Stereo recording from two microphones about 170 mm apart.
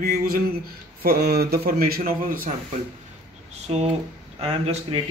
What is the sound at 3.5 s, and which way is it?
Speech, 40° right (ahead or behind).